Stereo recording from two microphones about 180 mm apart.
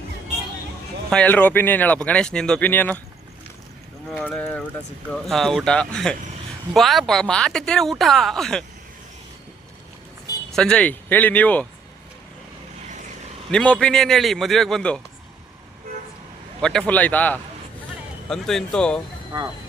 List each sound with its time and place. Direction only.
1.1 s speech: 10° left (ahead or behind)
4.2 s speech: 10° left (ahead or behind)
10.5 s speech: 5° left (ahead or behind)
13.5 s speech: 5° left (ahead or behind)
16.6 s speech: 5° left (ahead or behind)
19.3 s speech: 20° right (ahead or behind)